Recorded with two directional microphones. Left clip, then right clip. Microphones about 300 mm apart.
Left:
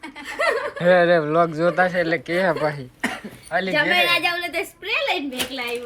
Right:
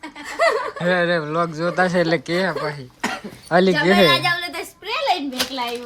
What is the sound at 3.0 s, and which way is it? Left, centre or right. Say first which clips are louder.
Cough: right 2 dB; right.